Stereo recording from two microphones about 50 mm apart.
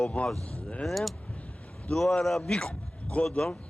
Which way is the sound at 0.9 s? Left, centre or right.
Centre.